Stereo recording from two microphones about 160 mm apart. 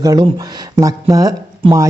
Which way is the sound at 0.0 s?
20° right (ahead or behind).